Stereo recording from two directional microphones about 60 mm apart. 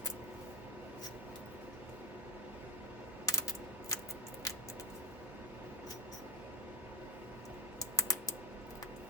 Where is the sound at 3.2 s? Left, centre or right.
Left.